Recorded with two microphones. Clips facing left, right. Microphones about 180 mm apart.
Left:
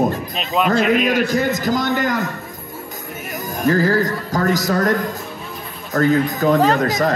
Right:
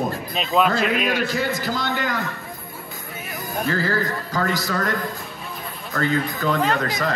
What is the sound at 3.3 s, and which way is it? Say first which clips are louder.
A man's voice: left 7 dB; 45° left (ahead or behind).